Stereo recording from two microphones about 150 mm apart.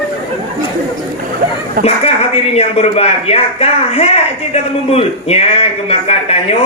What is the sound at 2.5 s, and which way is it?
Speech, 45° left (ahead or behind).